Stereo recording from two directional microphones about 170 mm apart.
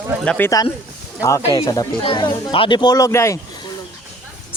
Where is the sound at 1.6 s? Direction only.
20° left (ahead or behind).